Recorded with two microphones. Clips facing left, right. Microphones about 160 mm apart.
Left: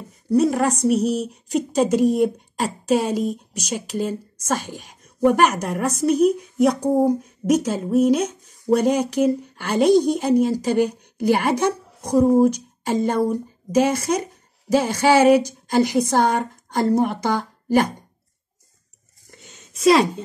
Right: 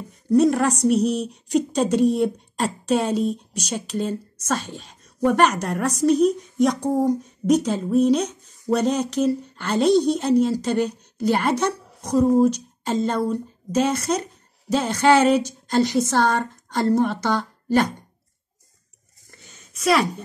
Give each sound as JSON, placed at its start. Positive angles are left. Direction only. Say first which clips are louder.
{"t": 0.4, "sound": "a woman's voice", "louder": "right 1 dB", "side_deg": 0}
{"t": 11.5, "sound": "a woman's voice", "louder": "left 2 dB", "side_deg": 55}
{"t": 12.2, "sound": "a woman's voice", "louder": "left 1 dB", "side_deg": 15}
{"t": 19.3, "sound": "a sound", "louder": "left 3 dB", "side_deg": 20}